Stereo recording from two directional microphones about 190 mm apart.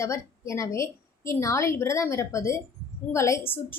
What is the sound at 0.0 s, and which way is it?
A woman's voice, 15° left (ahead or behind).